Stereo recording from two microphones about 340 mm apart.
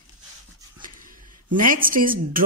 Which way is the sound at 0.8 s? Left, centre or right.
Right.